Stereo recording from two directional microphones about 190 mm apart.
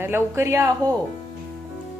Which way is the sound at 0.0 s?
10° right (ahead or behind).